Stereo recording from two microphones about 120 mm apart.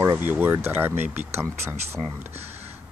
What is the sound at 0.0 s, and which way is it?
Speech, 25° right (ahead or behind).